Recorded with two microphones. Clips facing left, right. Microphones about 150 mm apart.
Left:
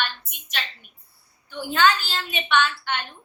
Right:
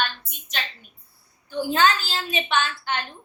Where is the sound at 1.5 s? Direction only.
35° right (ahead or behind).